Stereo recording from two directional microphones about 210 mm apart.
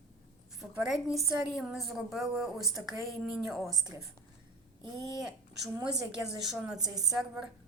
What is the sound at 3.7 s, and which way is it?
Speech, 15° right (ahead or behind).